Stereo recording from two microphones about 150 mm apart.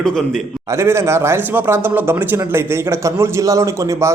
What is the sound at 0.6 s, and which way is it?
Speech, 15° right (ahead or behind).